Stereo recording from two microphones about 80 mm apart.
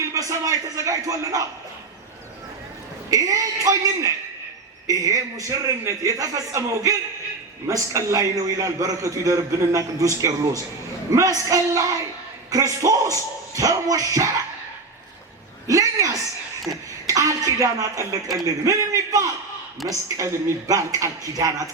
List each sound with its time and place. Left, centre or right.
0.0 s a man's voice: right
3.1 s a man's voice: right
15.6 s a sound: right
16.7 s a man's voice: right